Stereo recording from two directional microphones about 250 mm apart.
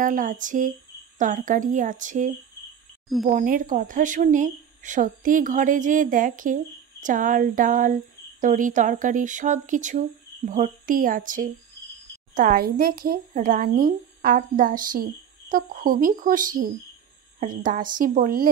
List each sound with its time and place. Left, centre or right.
0.0 s a woman's voice: right